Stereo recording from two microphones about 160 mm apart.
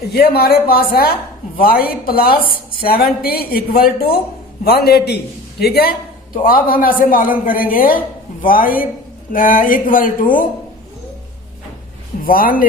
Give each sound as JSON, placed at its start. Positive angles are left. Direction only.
{"t": 0.1, "sound": "speech", "side_deg": 75}
{"t": 6.3, "sound": "speech", "side_deg": 65}
{"t": 12.2, "sound": "speech", "side_deg": 65}